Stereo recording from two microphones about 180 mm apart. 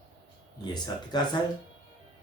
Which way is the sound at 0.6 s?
25° left (ahead or behind).